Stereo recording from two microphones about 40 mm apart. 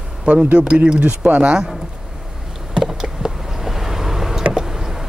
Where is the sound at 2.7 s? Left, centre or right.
Centre.